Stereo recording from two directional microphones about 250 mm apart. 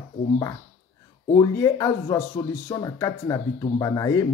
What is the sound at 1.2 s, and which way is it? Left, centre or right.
Speech, centre.